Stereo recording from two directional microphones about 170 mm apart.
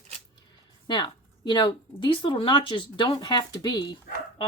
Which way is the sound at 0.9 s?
25° left (ahead or behind).